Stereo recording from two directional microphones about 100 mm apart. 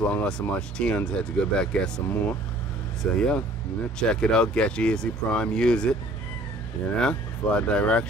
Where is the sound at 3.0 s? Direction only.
10° left (ahead or behind).